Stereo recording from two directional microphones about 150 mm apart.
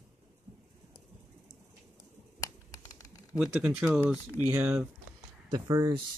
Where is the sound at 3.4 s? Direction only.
10° right (ahead or behind).